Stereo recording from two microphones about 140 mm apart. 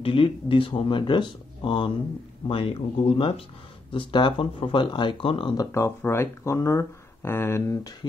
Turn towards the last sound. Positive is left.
turn(degrees=25)  # may be behind; listen again after turning